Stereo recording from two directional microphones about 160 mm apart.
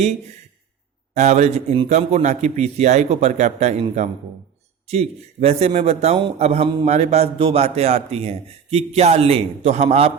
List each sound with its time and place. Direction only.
1.1 s a man's voice: 45° right (ahead or behind)